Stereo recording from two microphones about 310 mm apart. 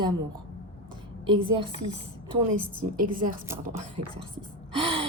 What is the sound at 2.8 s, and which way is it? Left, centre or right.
Speech, right.